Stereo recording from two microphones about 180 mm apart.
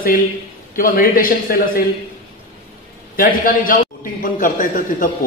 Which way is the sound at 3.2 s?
50° left (ahead or behind).